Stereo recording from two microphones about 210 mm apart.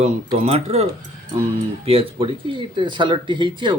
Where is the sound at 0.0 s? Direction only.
30° right (ahead or behind).